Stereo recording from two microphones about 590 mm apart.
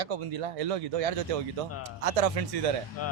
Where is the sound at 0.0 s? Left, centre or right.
Right.